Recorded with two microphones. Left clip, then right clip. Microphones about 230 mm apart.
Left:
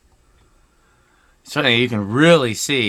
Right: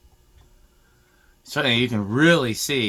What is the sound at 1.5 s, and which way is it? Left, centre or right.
Speech, left.